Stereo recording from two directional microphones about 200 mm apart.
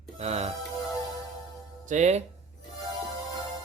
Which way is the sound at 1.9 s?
35° right (ahead or behind).